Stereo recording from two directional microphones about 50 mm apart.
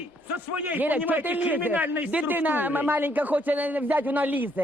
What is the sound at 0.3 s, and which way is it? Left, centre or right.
A man's voice, right.